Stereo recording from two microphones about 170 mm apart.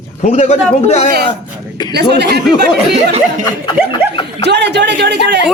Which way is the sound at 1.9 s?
75° right (ahead or behind).